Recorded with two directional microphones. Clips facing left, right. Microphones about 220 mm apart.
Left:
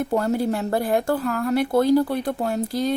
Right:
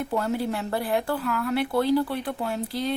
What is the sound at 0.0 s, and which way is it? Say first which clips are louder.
A woman's voice: left 5 dB; 40° left (ahead or behind).